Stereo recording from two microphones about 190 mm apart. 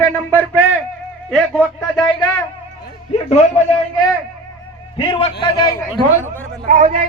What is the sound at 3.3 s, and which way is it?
Speech, 35° left (ahead or behind).